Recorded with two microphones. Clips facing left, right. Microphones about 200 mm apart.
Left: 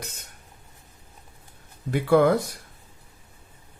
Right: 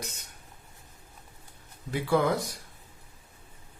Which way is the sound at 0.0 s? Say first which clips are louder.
Left 1 dB; 55° left (ahead or behind).